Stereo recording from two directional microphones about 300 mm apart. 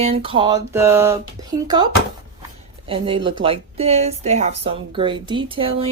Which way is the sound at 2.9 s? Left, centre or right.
Centre.